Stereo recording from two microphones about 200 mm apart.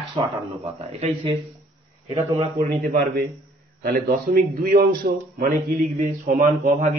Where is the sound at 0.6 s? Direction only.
30° right (ahead or behind).